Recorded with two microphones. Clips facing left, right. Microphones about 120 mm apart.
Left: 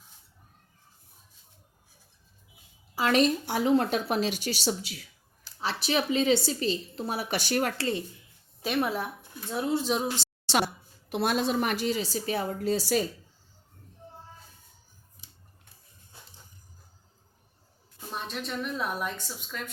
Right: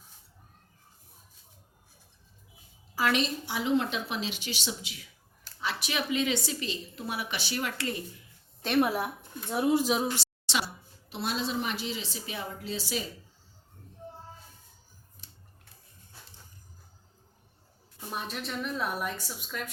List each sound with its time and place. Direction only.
3.1 s a woman's voice: 45° left (ahead or behind)
7.8 s speech: 30° left (ahead or behind)
8.6 s a woman's voice: centre (ahead or behind)
9.5 s speech: 15° right (ahead or behind)
11.1 s speech: 55° left (ahead or behind)
18.1 s a woman's voice: 5° right (ahead or behind)